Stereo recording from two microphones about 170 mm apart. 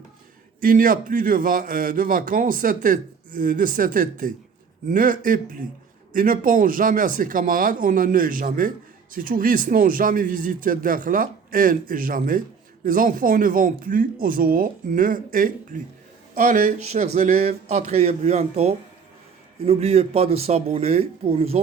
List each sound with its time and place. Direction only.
0.6 s a man's voice: 55° right (ahead or behind); by 21.6 s 35° right (ahead or behind)